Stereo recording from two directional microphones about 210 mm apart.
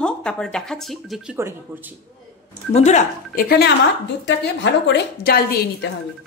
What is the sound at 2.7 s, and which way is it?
A woman's voice, 35° left (ahead or behind).